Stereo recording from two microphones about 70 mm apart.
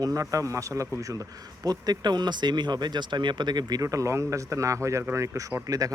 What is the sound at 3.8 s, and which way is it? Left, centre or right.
Speech, right.